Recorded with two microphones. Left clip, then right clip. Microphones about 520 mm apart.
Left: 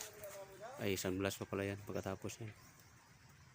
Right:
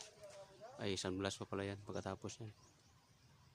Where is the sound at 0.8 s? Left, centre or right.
Right.